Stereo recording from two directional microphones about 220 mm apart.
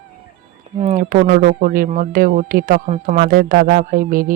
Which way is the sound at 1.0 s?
40° right (ahead or behind).